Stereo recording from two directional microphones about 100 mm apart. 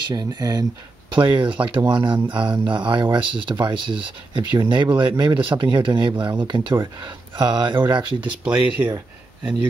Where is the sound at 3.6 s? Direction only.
55° right (ahead or behind).